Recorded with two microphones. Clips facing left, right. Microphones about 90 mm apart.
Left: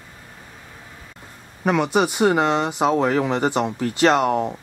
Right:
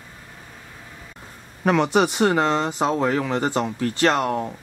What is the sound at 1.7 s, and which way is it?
Speech, 5° left (ahead or behind).